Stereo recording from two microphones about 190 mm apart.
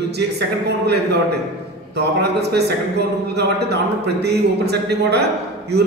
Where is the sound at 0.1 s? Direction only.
60° right (ahead or behind).